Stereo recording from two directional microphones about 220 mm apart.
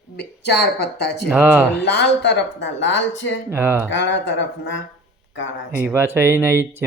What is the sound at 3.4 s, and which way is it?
Speech, 10° right (ahead or behind).